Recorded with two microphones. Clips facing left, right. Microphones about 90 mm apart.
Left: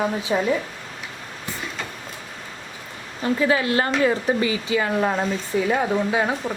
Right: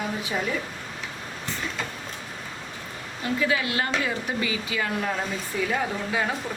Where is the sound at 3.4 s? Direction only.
35° left (ahead or behind).